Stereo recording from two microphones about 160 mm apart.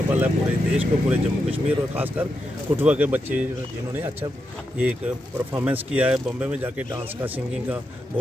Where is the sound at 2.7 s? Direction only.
10° right (ahead or behind).